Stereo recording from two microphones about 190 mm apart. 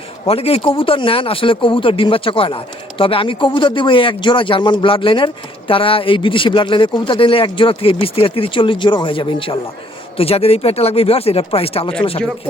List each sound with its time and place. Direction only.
0.3 s speech: 30° left (ahead or behind)